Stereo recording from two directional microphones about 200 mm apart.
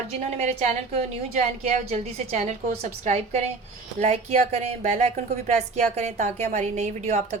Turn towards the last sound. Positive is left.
turn(degrees=-35)  # may be behind; listen again after turning